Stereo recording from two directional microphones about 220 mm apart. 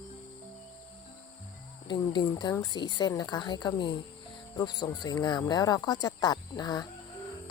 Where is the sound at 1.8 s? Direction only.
20° left (ahead or behind).